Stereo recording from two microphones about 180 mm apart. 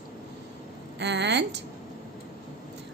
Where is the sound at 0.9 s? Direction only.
75° right (ahead or behind).